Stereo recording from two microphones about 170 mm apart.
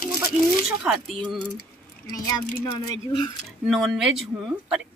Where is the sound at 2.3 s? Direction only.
25° left (ahead or behind).